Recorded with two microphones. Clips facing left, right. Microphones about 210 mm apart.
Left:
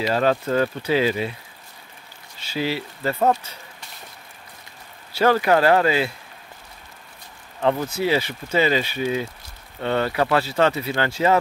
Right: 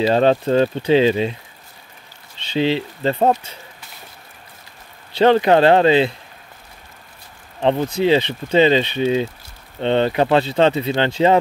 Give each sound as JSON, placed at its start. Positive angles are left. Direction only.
{"t": 0.0, "sound": "speech", "side_deg": -25}
{"t": 2.5, "sound": "speech", "side_deg": -25}
{"t": 5.1, "sound": "speech", "side_deg": -25}
{"t": 7.6, "sound": "speech", "side_deg": -25}